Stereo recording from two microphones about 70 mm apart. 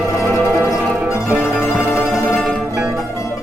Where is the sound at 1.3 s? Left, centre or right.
Centre.